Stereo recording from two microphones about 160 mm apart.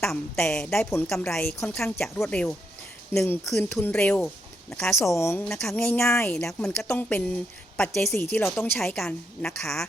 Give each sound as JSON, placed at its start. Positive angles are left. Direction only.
{"t": 0.0, "sound": "a woman's voice", "side_deg": 5}
{"t": 5.5, "sound": "a woman's voice", "side_deg": 5}
{"t": 8.1, "sound": "speech", "side_deg": 15}
{"t": 8.4, "sound": "a woman's voice", "side_deg": 5}